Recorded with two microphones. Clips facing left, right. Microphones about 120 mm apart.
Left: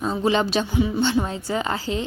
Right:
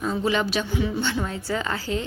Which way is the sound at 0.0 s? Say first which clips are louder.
Left 3 dB; 25° left (ahead or behind).